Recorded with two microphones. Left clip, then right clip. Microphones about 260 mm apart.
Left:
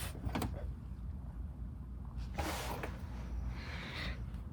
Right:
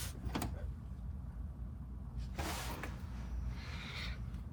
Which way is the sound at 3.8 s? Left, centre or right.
Left.